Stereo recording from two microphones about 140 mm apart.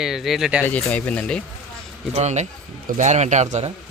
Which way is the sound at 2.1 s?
55° right (ahead or behind).